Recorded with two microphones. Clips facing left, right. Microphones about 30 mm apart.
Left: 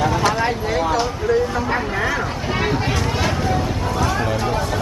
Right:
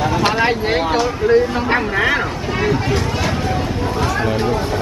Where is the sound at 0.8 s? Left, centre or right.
Right.